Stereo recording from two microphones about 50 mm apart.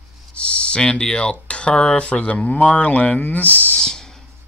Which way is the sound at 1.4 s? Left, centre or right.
Left.